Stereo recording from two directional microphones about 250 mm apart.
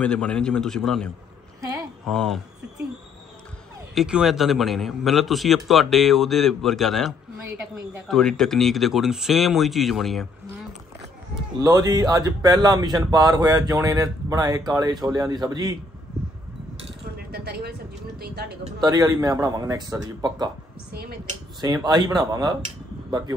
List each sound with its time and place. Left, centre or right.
0.0 s a man's voice: centre
3.9 s a man's voice: centre
11.5 s speech: centre
17.0 s a sound: right
18.2 s speech: right
18.8 s speech: centre
20.9 s speech: right
21.5 s speech: centre